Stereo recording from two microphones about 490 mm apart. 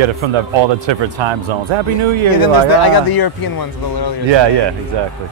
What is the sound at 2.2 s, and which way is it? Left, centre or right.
Speech, left.